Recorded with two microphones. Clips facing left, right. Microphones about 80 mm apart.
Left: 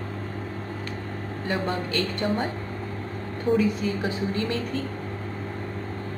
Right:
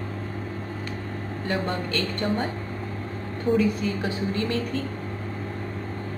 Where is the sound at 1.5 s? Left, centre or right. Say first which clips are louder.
Even; centre.